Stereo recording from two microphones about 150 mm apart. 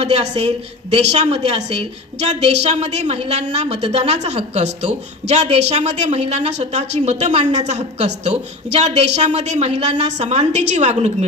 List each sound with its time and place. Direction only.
0.0 s a woman's voice: 45° right (ahead or behind)